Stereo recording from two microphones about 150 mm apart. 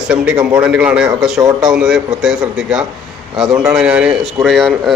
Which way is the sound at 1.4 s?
25° right (ahead or behind).